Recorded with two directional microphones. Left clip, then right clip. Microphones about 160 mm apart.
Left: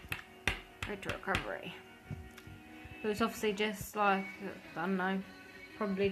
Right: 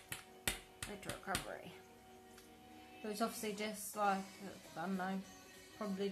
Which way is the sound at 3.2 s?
35° right (ahead or behind).